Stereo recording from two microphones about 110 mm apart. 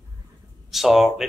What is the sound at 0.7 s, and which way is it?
Speech, centre (ahead or behind).